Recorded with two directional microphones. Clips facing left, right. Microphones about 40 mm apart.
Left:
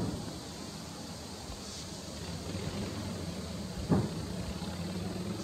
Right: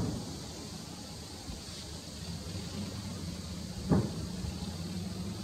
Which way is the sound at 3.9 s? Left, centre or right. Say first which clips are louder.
Right 1 dB; left.